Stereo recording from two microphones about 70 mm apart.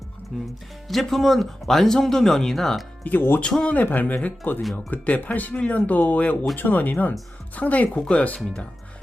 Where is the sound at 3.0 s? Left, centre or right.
Left.